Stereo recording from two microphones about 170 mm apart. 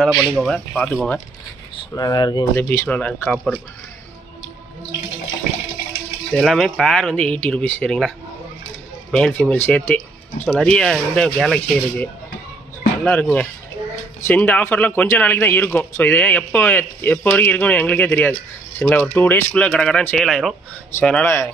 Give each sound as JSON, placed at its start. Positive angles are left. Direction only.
{"t": 0.0, "sound": "speech", "side_deg": 0}
{"t": 2.0, "sound": "speech", "side_deg": 25}
{"t": 2.5, "sound": "a man's voice", "side_deg": 10}
{"t": 6.3, "sound": "speech", "side_deg": 0}
{"t": 9.1, "sound": "a man's voice", "side_deg": 5}